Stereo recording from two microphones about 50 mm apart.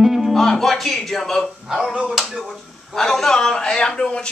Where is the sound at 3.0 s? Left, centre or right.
Centre.